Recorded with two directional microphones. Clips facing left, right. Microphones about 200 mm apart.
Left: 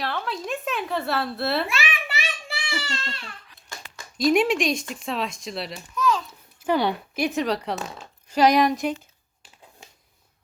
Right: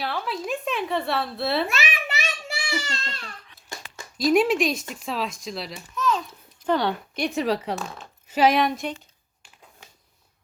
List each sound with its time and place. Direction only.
0.0 s a woman's voice: 5° right (ahead or behind)
1.6 s a sound: 40° right (ahead or behind)
4.2 s a child's voice: centre (ahead or behind)